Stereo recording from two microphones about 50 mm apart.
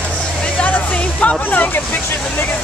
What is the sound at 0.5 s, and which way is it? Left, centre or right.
Music, left.